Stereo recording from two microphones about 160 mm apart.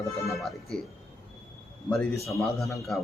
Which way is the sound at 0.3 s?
Centre (ahead or behind).